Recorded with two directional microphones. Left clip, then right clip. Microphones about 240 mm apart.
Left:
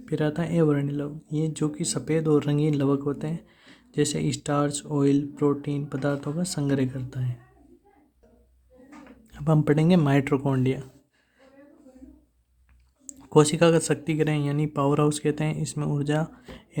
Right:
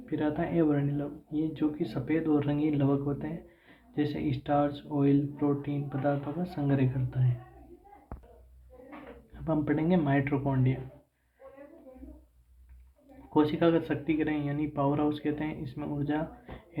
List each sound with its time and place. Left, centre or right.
0.0 s speech: left
9.3 s speech: left
13.3 s speech: left